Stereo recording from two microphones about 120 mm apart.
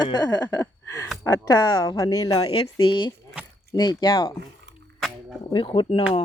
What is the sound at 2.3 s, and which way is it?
Speech, 50° left (ahead or behind).